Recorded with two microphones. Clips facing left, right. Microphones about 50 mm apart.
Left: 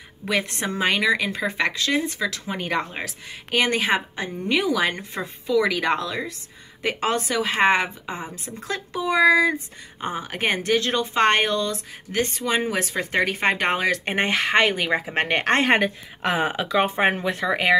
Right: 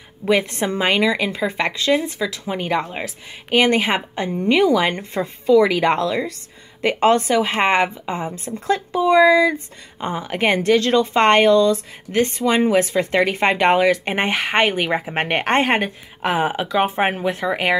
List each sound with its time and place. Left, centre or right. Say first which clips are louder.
0.2 s speech: right 6 dB; right
0.7 s a woman's voice: right 2 dB; right
9.9 s a woman's voice: right 5 dB; right
11.1 s a woman's voice: right 6 dB; right; by 15.7 s centre
15.7 s a woman's voice: even; centre